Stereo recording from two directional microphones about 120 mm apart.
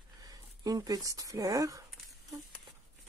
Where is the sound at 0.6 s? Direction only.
30° right (ahead or behind).